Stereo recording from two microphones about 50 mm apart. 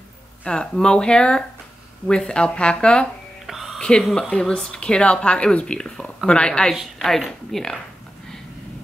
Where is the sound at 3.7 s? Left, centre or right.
Centre.